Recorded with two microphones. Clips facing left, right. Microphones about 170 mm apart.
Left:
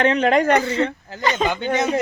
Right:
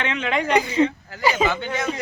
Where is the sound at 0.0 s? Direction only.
40° left (ahead or behind).